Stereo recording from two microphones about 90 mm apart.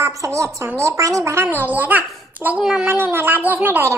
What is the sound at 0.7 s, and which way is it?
Speech, 35° right (ahead or behind).